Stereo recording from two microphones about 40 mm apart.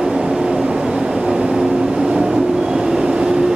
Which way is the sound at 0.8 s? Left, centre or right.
Centre.